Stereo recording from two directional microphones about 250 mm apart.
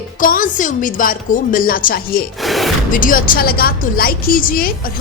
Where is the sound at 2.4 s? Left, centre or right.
Centre.